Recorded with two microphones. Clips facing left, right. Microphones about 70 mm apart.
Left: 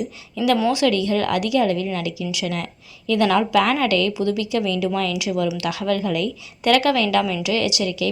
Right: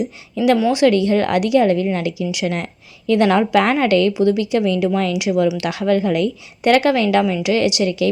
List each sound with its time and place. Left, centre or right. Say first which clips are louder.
0.7 s a woman's voice: right 5 dB; right